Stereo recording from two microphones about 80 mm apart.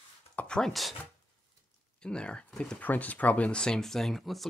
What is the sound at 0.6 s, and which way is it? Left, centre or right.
Speech, centre.